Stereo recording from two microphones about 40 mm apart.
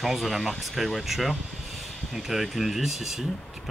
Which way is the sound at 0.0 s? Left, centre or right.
Centre.